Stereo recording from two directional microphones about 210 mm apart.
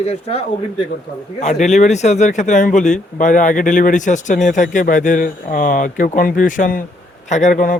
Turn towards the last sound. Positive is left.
turn(degrees=35)  # may be behind; listen again after turning